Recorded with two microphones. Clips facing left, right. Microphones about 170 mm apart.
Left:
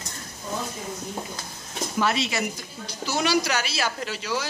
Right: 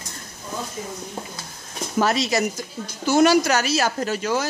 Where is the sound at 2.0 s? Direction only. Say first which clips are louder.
Right 5 dB; 40° right (ahead or behind).